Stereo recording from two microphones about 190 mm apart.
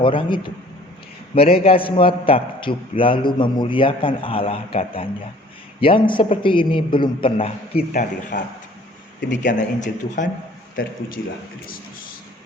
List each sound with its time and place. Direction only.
0.0 s a man's voice: 25° left (ahead or behind)
1.4 s a man's voice: 30° left (ahead or behind)
8.3 s speech: 60° left (ahead or behind)
9.3 s speech: 40° left (ahead or behind)